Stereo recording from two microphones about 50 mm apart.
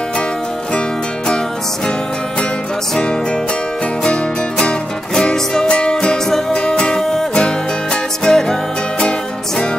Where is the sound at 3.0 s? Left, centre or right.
Centre.